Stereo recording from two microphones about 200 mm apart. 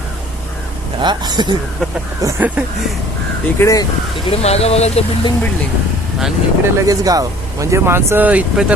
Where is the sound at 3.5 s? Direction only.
15° left (ahead or behind).